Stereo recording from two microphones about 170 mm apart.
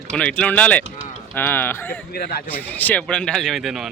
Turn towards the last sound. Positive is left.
turn(degrees=0)  # may be behind; listen again after turning